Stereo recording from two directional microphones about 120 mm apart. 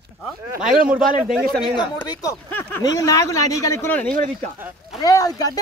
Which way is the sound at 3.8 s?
15° left (ahead or behind).